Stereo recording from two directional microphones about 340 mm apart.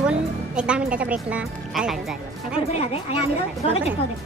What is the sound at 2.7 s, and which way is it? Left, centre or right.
Speech, centre.